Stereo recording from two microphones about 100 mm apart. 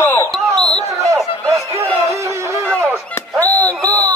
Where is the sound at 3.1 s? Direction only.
15° left (ahead or behind).